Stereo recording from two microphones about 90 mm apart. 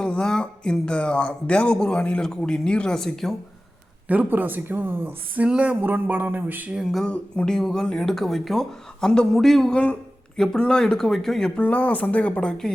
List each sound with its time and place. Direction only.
0.0 s speech: 10° left (ahead or behind)
4.1 s speech: 20° right (ahead or behind)
7.0 s speech: 10° left (ahead or behind)